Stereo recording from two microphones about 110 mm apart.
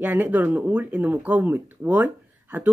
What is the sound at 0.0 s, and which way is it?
Speech, 15° right (ahead or behind).